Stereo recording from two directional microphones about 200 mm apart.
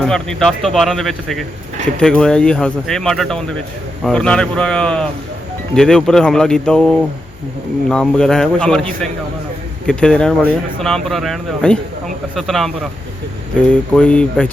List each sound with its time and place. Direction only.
0.0 s speech: centre (ahead or behind)